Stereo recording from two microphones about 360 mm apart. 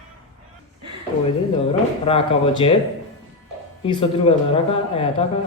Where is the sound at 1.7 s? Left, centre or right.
Centre.